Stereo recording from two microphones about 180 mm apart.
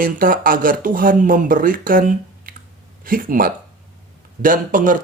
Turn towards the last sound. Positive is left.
turn(degrees=-45)  # may be behind; listen again after turning